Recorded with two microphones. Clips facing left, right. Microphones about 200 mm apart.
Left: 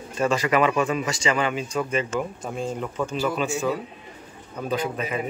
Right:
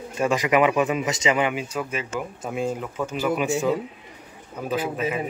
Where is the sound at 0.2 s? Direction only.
15° right (ahead or behind).